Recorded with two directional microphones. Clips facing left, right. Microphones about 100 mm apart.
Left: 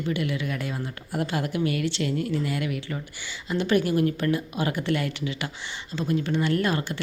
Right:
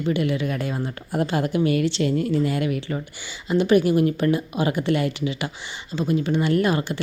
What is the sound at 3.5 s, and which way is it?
Speech, 15° right (ahead or behind).